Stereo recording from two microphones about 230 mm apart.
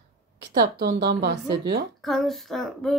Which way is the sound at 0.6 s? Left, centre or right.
Right.